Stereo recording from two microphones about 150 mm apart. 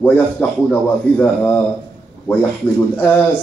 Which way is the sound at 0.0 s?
10° left (ahead or behind).